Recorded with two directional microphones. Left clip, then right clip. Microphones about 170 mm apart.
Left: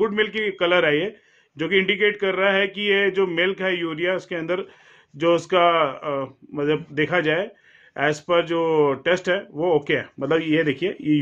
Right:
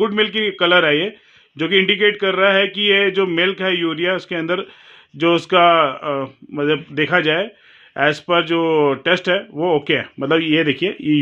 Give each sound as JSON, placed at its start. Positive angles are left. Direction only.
{"t": 0.0, "sound": "speech", "side_deg": -50}